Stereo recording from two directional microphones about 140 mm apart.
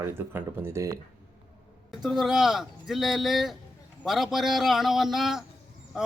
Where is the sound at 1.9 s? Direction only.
5° right (ahead or behind).